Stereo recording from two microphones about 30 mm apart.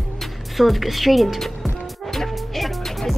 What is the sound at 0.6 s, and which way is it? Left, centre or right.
Speech, centre.